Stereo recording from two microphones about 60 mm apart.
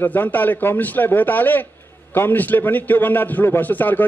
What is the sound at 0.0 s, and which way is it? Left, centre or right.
A man's voice, left.